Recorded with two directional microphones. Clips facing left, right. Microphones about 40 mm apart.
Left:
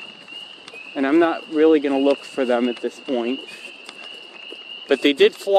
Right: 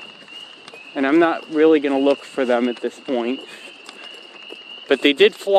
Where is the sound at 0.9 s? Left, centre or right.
Right.